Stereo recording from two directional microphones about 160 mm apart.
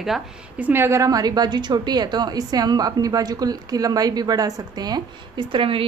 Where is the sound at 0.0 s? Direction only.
5° right (ahead or behind).